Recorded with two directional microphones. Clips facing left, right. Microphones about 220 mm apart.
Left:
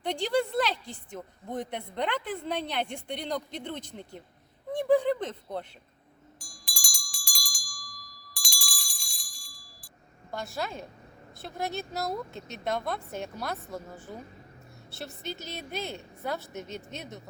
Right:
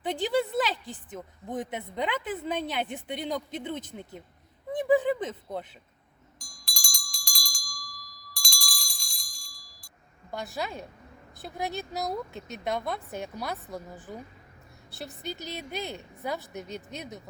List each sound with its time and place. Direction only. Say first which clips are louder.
0.0 s speech: right 1 dB; 5° right (ahead or behind)
6.4 s bell: right 3 dB; 5° left (ahead or behind)
10.3 s speech: even; centre (ahead or behind)
15.4 s speech: right 1 dB; centre (ahead or behind)